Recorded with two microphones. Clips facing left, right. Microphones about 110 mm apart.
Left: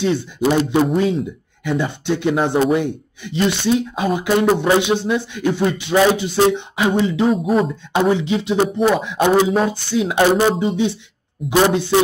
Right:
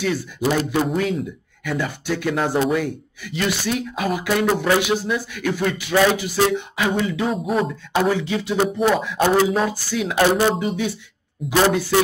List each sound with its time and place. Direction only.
0.0 s speech: 25° left (ahead or behind)
7.2 s speech: centre (ahead or behind)
7.6 s speech: 25° left (ahead or behind)